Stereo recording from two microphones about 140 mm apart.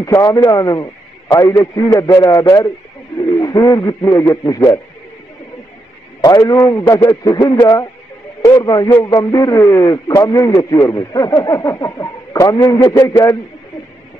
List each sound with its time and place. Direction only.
0.2 s speech: 25° left (ahead or behind)
6.2 s speech: 30° left (ahead or behind)